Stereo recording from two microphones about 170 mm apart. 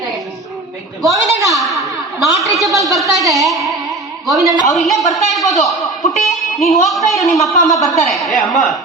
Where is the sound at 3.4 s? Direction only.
Centre (ahead or behind).